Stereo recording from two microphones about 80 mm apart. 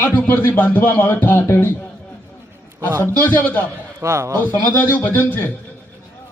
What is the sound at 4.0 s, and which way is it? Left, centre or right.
Speech, right.